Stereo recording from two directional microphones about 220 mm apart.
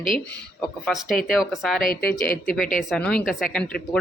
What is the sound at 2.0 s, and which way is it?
Speech, 45° left (ahead or behind).